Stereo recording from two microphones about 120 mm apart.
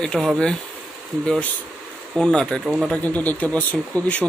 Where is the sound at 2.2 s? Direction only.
5° left (ahead or behind).